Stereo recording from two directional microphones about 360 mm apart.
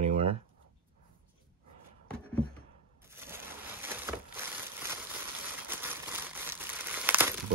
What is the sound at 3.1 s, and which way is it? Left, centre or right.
Crushing, centre.